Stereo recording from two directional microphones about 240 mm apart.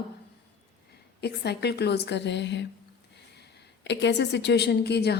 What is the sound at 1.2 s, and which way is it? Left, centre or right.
A woman's voice, left.